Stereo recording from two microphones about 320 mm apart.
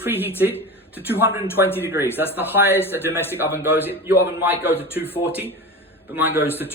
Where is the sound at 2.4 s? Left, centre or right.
Centre.